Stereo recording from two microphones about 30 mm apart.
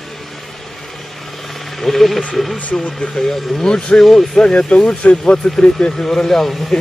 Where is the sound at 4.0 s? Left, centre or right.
Centre.